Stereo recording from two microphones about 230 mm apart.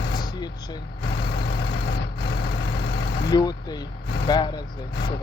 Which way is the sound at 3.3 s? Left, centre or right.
Centre.